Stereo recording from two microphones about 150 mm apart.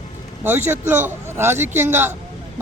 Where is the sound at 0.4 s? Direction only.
15° right (ahead or behind).